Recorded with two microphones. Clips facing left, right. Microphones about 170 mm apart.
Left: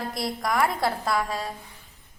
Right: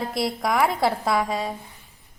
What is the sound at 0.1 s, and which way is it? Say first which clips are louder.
A woman's voice: right 3 dB; centre (ahead or behind).